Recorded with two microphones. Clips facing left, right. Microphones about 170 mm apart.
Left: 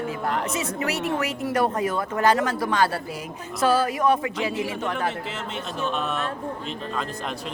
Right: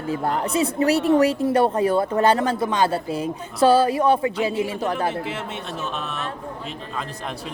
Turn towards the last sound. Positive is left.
turn(degrees=0)  # may be behind; listen again after turning